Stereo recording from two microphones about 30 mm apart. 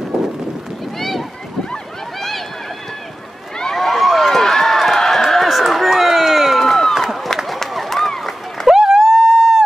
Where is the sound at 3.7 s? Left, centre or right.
Centre.